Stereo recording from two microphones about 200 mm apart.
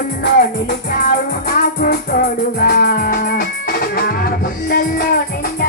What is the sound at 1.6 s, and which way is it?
Music, 45° left (ahead or behind).